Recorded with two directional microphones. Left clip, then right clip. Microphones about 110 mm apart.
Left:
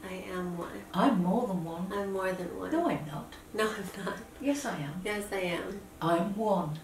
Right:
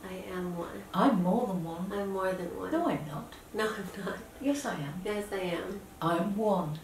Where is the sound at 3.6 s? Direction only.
10° left (ahead or behind).